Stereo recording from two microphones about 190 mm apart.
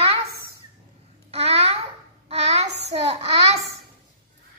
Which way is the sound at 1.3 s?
35° right (ahead or behind).